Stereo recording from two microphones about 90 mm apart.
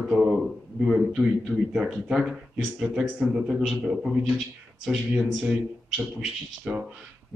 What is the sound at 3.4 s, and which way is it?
A man's voice, centre (ahead or behind).